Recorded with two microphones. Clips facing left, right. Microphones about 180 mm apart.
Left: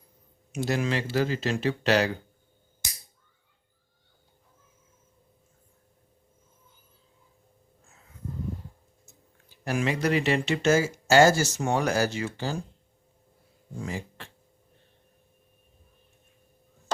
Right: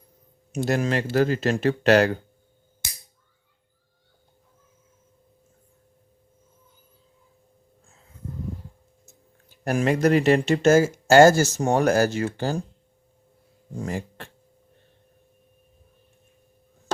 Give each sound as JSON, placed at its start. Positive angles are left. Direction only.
{"t": 0.5, "sound": "speech", "side_deg": -45}
{"t": 9.5, "sound": "speech", "side_deg": -50}
{"t": 13.7, "sound": "speech", "side_deg": -45}